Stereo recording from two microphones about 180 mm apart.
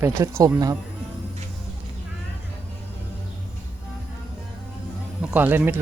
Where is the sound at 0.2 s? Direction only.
15° right (ahead or behind).